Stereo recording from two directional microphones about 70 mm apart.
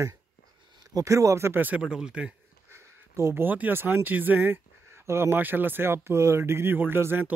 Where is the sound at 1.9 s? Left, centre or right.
Centre.